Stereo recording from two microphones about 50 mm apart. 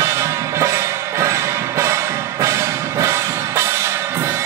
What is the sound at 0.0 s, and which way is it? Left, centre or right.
Music, right.